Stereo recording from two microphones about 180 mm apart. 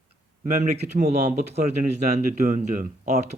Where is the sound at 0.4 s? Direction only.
45° right (ahead or behind).